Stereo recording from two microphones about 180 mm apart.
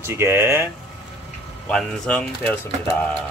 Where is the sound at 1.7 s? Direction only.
5° left (ahead or behind).